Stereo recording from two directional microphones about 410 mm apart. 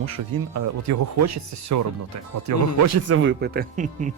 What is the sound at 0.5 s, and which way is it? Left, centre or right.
Speech, right.